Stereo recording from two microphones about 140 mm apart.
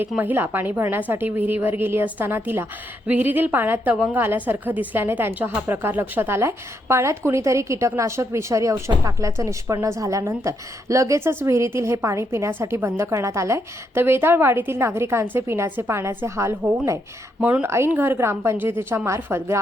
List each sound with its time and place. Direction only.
0.2 s a woman's voice: 15° right (ahead or behind)